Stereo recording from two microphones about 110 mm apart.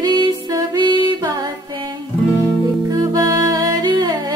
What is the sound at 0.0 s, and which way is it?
Music, 40° right (ahead or behind).